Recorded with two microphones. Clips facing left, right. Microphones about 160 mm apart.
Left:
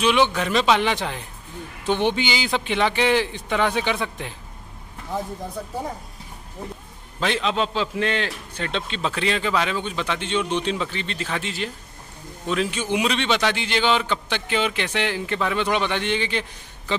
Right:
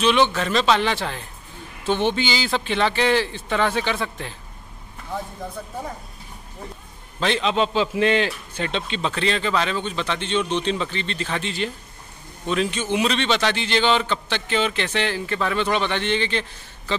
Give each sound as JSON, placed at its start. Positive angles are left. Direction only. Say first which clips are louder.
{"t": 0.0, "sound": "speech", "louder": "right 1 dB", "side_deg": 10}
{"t": 7.2, "sound": "a man's voice", "louder": "right 2 dB", "side_deg": 5}